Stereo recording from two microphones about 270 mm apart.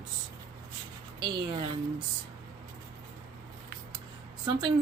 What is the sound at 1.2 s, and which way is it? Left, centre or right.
Speech, centre.